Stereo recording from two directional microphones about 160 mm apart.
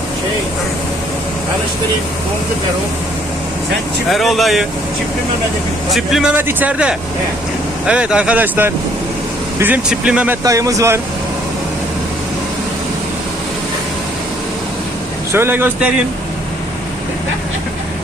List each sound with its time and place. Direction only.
4.1 s speech: centre (ahead or behind)
5.9 s speech: centre (ahead or behind)
10.4 s speech: 20° right (ahead or behind)
15.3 s speech: 15° right (ahead or behind)